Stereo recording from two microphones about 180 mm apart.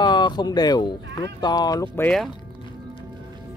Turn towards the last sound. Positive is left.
turn(degrees=0)  # may be behind; listen again after turning